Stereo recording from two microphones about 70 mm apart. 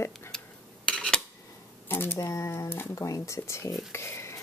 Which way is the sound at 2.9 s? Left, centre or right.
Left.